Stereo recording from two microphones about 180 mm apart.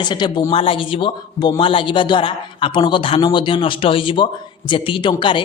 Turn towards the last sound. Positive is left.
turn(degrees=25)  # may be behind; listen again after turning